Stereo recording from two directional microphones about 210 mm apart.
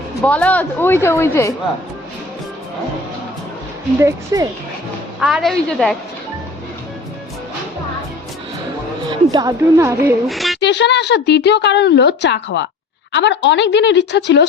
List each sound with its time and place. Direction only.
0.2 s speech: 5° left (ahead or behind)
4.3 s a woman's voice: 15° right (ahead or behind)
5.2 s a woman's voice: centre (ahead or behind)
9.0 s a woman's voice: 20° right (ahead or behind)
10.2 s a woman's voice: centre (ahead or behind)
10.6 s speech: 55° left (ahead or behind)